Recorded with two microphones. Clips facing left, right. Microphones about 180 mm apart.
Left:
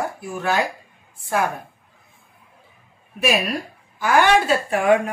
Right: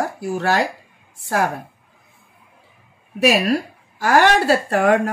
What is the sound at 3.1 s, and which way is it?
Speech, 85° right.